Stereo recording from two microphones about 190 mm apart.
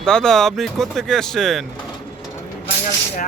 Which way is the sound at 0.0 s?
5° left (ahead or behind).